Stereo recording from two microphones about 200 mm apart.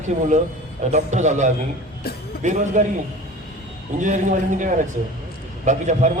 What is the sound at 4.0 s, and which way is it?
A man's voice, 40° right (ahead or behind).